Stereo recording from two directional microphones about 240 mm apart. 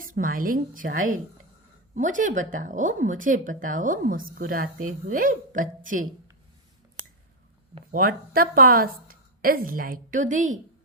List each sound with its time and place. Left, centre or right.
0.0 s a woman's voice: right
7.9 s a woman's voice: right